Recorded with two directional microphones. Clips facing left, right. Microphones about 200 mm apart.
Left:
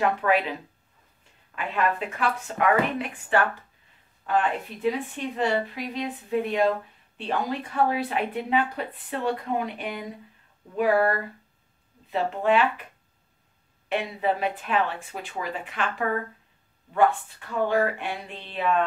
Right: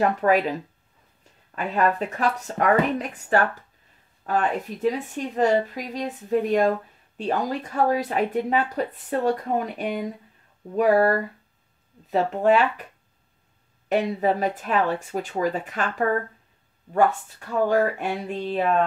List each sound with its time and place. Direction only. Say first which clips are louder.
0.0 s speech: right 3 dB; 40° right (ahead or behind)
13.8 s speech: right 4 dB; 40° right (ahead or behind)
16.9 s speech: right 1 dB; 40° right (ahead or behind)